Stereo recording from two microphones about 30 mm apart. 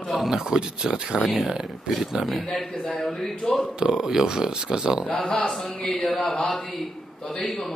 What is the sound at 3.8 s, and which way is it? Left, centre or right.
Speech, right.